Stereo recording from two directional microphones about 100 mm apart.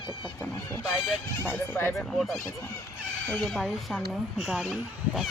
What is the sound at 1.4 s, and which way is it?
Speech, 25° left (ahead or behind).